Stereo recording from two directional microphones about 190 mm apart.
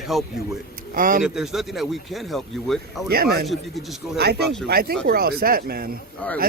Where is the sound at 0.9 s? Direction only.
45° right (ahead or behind).